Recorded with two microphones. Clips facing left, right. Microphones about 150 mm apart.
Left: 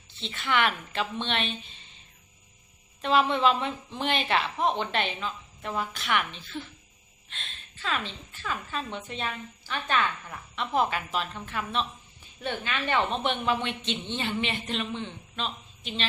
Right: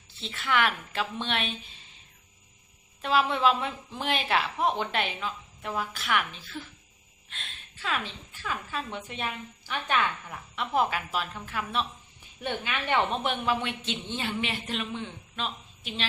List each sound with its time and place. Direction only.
0.2 s a woman's voice: 5° right (ahead or behind)
3.0 s a woman's voice: 5° right (ahead or behind)
13.2 s a woman's voice: 5° right (ahead or behind)